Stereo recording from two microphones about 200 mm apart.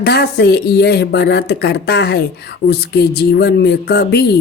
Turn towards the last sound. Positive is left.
turn(degrees=55)  # may be behind; listen again after turning